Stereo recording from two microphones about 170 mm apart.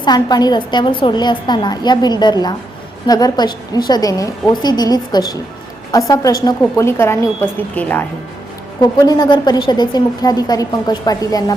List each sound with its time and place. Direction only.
0.0 s a woman's voice: 25° left (ahead or behind)
8.8 s a woman's voice: 25° left (ahead or behind)